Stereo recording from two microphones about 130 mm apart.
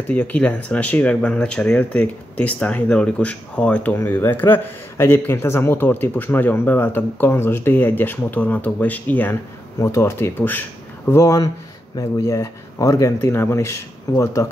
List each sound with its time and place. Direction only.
0.1 s speech: 10° left (ahead or behind)